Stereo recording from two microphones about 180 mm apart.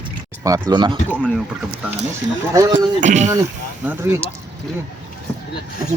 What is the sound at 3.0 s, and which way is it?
Speech, 40° right (ahead or behind).